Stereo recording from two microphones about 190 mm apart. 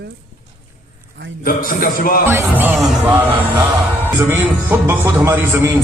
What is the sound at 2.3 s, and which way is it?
A man's voice, 10° right (ahead or behind).